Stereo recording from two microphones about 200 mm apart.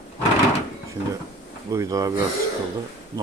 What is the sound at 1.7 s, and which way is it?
Speech, 15° right (ahead or behind).